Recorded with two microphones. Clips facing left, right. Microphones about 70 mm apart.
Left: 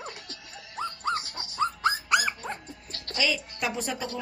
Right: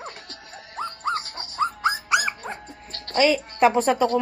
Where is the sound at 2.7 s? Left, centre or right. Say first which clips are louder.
Right 3 dB; right.